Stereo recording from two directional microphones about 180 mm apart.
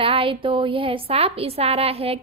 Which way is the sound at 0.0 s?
30° right (ahead or behind).